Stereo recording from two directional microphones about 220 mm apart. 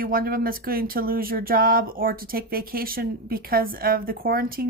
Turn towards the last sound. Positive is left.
turn(degrees=-40)  # may be behind; listen again after turning